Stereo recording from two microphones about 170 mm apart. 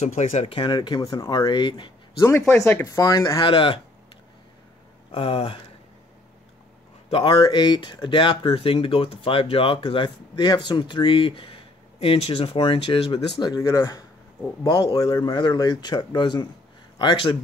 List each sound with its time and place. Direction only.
0.0 s speech: 40° left (ahead or behind)
2.2 s speech: 15° left (ahead or behind)
3.3 s speech: 30° left (ahead or behind)
5.1 s speech: 35° left (ahead or behind)
7.1 s speech: 30° left (ahead or behind)
13.4 s speech: 20° left (ahead or behind)
14.6 s speech: 30° left (ahead or behind)
15.0 s speech: 20° left (ahead or behind)